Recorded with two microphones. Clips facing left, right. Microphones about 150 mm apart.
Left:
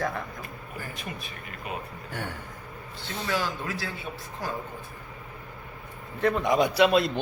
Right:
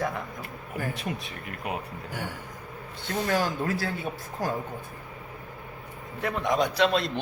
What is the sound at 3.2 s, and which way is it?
Speech, 45° right (ahead or behind).